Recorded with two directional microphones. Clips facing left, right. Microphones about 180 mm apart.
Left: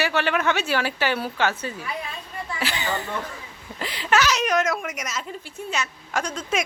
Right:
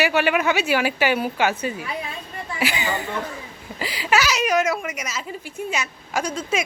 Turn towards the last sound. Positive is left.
turn(degrees=-5)  # may be behind; listen again after turning